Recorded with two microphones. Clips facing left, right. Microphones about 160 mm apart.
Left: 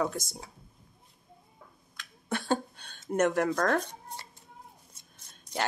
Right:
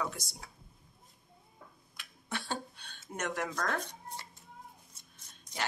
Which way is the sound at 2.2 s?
50° left (ahead or behind).